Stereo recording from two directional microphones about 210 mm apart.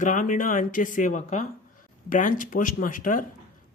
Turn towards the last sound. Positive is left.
turn(degrees=40)  # may be behind; listen again after turning